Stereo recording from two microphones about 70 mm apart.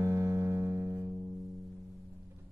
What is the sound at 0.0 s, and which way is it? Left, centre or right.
Music, right.